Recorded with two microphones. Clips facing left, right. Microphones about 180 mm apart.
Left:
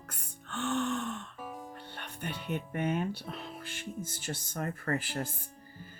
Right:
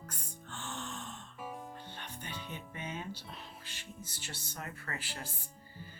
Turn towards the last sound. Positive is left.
turn(degrees=50)  # may be behind; listen again after turning